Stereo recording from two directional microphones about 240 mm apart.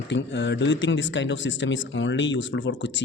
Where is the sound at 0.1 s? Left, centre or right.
Left.